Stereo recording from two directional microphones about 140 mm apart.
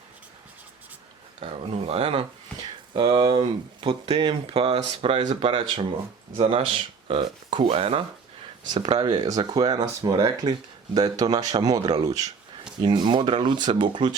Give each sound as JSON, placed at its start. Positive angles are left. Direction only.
{"t": 1.9, "sound": "speech", "side_deg": -45}
{"t": 8.6, "sound": "speech", "side_deg": -30}